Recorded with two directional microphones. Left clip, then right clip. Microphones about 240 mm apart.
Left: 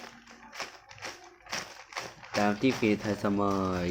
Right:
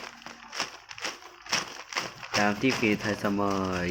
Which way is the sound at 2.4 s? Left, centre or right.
Centre.